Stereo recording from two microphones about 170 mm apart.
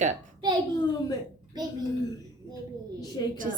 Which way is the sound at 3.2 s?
25° left (ahead or behind).